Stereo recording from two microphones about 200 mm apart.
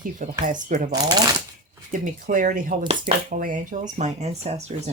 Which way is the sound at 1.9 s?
40° right (ahead or behind).